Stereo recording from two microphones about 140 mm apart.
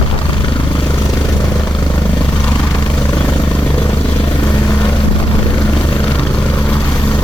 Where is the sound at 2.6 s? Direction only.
30° left (ahead or behind).